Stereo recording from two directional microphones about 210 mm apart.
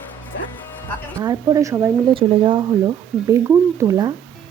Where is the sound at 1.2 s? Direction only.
20° right (ahead or behind).